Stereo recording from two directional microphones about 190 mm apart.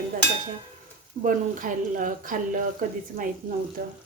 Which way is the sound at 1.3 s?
45° right (ahead or behind).